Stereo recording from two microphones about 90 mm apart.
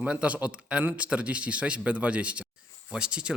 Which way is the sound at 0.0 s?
15° right (ahead or behind).